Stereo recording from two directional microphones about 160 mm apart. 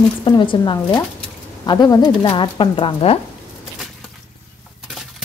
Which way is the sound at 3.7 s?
Centre (ahead or behind).